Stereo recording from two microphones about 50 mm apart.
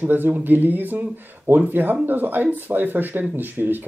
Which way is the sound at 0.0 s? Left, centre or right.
Right.